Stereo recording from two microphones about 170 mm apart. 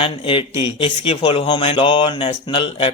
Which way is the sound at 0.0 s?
30° left (ahead or behind).